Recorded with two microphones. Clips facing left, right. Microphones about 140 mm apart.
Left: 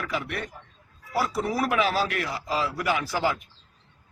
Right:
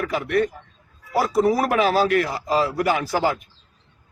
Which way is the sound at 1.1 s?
45° right (ahead or behind).